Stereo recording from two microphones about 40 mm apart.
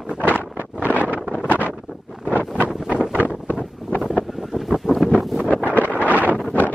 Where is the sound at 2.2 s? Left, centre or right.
Right.